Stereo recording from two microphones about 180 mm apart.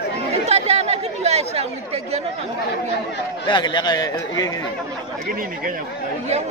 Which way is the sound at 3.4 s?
25° left (ahead or behind).